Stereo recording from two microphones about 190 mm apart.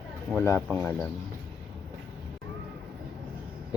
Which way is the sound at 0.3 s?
15° left (ahead or behind).